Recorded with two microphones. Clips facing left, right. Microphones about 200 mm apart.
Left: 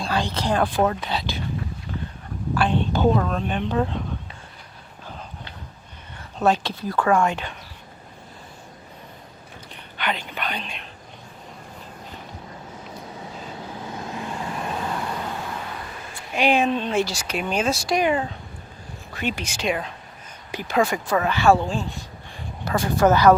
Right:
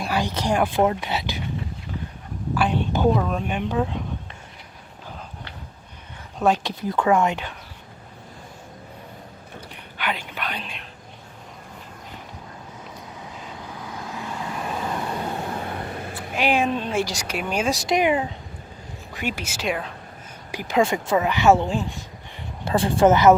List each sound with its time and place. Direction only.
0.0 s speech: 10° right (ahead or behind)
2.6 s a woman's voice: 10° right (ahead or behind)
6.4 s a woman's voice: 15° right (ahead or behind)
10.0 s whispering: 5° right (ahead or behind)
13.7 s vehicle: 25° left (ahead or behind)
14.9 s vehicle: 25° right (ahead or behind)
15.6 s vehicle: 50° right (ahead or behind)
16.3 s a woman's voice: 5° right (ahead or behind)
19.1 s a woman's voice: 10° right (ahead or behind)
22.6 s a woman's voice: 30° right (ahead or behind)